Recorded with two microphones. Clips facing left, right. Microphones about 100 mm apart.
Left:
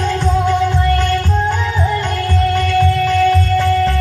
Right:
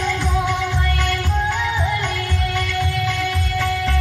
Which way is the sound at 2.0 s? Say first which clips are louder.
Left 6 dB; 40° left (ahead or behind).